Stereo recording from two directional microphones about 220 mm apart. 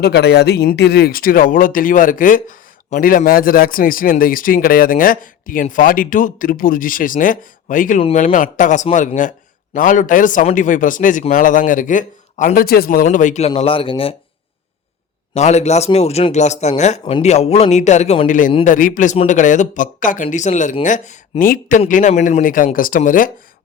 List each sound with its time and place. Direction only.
0.0 s speech: 50° left (ahead or behind); by 14.2 s 25° left (ahead or behind)
15.4 s speech: 30° left (ahead or behind)